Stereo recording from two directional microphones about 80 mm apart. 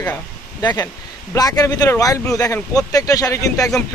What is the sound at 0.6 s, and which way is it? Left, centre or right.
Speech, left.